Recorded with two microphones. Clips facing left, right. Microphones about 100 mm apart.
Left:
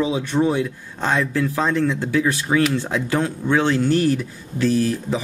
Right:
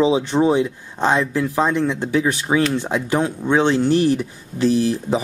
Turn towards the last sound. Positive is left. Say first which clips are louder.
# right 2 dB
turn(degrees=-25)  # may be behind; listen again after turning